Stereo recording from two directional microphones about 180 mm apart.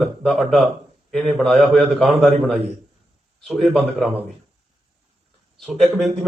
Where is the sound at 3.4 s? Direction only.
Centre (ahead or behind).